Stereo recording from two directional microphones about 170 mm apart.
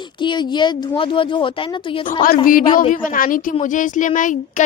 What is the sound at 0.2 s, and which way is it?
A woman's voice, 25° left (ahead or behind).